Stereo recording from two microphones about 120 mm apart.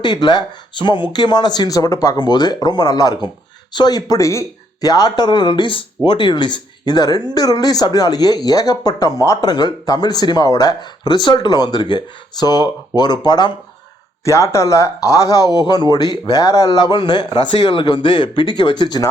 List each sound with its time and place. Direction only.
0.0 s speech: 40° left (ahead or behind)
14.3 s speech: 25° left (ahead or behind)